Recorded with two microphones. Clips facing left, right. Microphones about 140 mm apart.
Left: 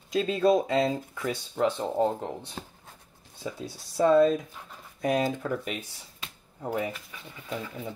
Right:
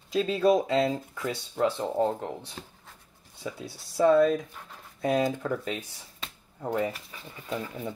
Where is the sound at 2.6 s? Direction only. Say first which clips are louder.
Left 3 dB; 35° left (ahead or behind).